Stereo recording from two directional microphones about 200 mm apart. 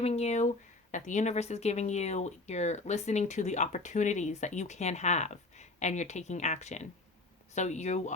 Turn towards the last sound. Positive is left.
turn(degrees=35)  # may be behind; listen again after turning